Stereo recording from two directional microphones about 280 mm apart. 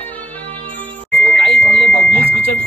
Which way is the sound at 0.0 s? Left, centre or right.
Centre.